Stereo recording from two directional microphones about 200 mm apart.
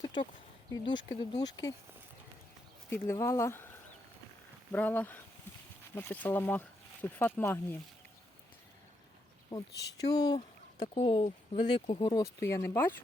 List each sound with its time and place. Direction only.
0.0 s a sound: 25° left (ahead or behind)
0.7 s speech: 25° left (ahead or behind)
2.9 s speech: 15° left (ahead or behind)
4.7 s speech: 10° left (ahead or behind)
9.5 s speech: 20° left (ahead or behind)